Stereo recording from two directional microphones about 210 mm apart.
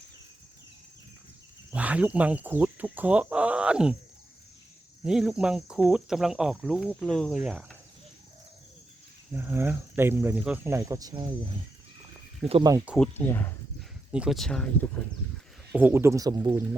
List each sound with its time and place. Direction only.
1.7 s speech: 5° right (ahead or behind)
5.0 s speech: centre (ahead or behind)
9.3 s speech: 10° right (ahead or behind)
12.5 s speech: 25° right (ahead or behind)
12.7 s speech: 5° right (ahead or behind)
13.0 s speech: 10° left (ahead or behind)
14.1 s speech: 5° right (ahead or behind)
15.7 s speech: 10° right (ahead or behind)